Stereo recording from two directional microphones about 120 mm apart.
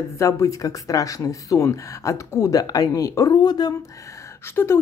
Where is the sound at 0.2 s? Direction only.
25° left (ahead or behind).